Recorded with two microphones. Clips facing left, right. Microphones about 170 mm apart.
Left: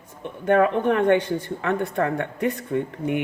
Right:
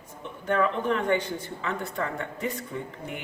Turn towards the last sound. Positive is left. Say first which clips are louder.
# left 11 dB
turn(degrees=65)  # may be behind; listen again after turning